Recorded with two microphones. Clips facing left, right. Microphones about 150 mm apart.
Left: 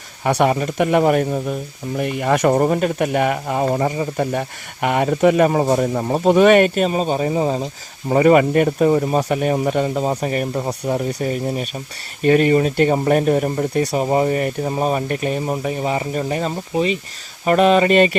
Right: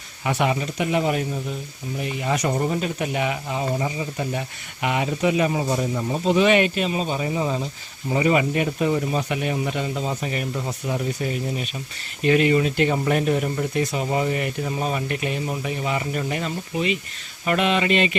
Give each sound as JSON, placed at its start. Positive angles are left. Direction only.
{"t": 0.3, "sound": "speech", "side_deg": 45}
{"t": 8.1, "sound": "speech", "side_deg": 50}